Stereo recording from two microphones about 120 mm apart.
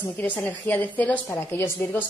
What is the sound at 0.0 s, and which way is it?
A woman's voice, 15° left (ahead or behind).